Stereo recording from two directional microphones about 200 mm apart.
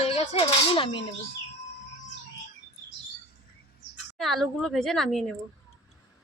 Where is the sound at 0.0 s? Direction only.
30° left (ahead or behind).